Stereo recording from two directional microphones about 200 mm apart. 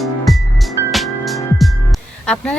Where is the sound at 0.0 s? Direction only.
Centre (ahead or behind).